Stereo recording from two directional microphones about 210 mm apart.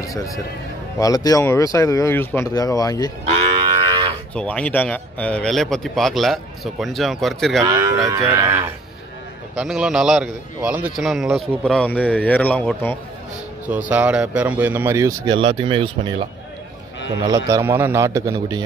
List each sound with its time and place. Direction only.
0.0 s a sound: 15° left (ahead or behind)
0.9 s speech: 15° left (ahead or behind)
4.4 s a man's voice: 5° left (ahead or behind)
7.6 s speech: 15° right (ahead or behind)
9.6 s a man's voice: 5° right (ahead or behind)
13.7 s speech: 5° right (ahead or behind)